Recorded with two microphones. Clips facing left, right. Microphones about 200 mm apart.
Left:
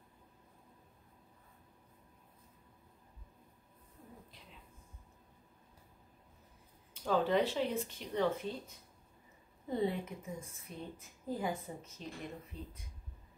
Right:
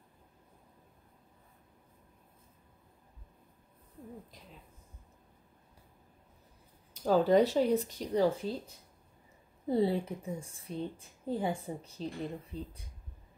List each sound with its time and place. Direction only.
6.9 s a woman's voice: 40° right (ahead or behind)